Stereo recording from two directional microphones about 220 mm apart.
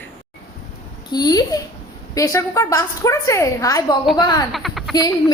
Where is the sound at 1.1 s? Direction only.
20° left (ahead or behind).